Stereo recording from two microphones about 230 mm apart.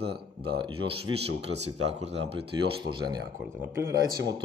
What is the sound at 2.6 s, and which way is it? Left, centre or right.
Speech, centre.